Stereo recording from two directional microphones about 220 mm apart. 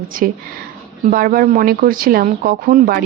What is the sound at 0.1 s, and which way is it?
Speech, 40° right (ahead or behind).